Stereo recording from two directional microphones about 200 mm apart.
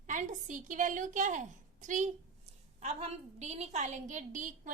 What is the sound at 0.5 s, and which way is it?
A woman's voice, 40° right (ahead or behind).